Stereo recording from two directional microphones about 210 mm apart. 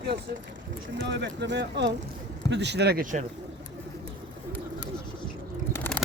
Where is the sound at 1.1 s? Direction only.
55° right (ahead or behind).